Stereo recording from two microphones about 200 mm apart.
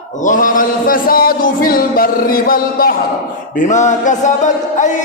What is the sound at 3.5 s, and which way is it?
Speech, 40° left (ahead or behind).